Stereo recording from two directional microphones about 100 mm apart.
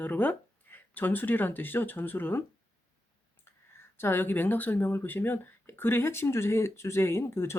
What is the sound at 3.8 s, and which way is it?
Speech, 25° left (ahead or behind).